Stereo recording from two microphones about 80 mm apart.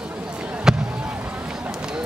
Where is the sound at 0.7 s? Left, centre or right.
Centre.